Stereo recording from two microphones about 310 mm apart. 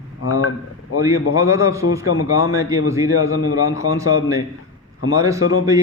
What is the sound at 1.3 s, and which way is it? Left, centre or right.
Speech, centre.